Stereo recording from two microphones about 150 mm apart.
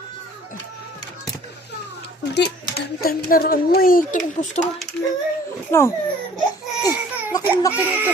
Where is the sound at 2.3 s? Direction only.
90° left; by 4.6 s 60° left (ahead or behind).